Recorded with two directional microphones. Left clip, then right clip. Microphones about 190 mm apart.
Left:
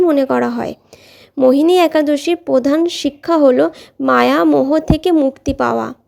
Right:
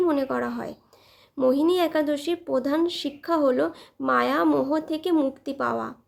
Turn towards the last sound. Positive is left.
turn(degrees=40)  # may be behind; listen again after turning